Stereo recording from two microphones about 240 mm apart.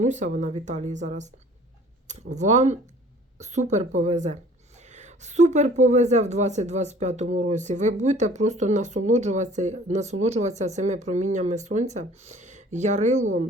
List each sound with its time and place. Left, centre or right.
0.0 s speech: right
2.3 s speech: right